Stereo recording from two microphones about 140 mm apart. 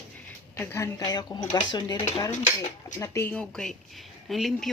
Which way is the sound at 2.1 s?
25° left (ahead or behind).